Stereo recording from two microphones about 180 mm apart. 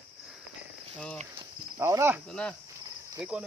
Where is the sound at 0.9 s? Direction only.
5° left (ahead or behind).